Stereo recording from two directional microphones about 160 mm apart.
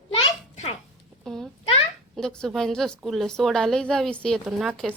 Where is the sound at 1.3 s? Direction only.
5° left (ahead or behind).